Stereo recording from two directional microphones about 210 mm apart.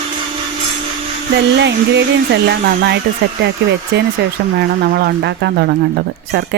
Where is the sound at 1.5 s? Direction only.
55° right (ahead or behind).